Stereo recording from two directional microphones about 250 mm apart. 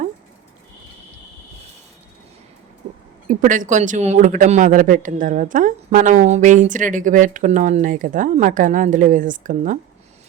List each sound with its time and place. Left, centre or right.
3.2 s speech: right